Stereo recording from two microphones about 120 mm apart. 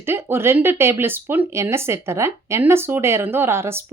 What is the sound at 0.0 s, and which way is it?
Speech, 20° right (ahead or behind).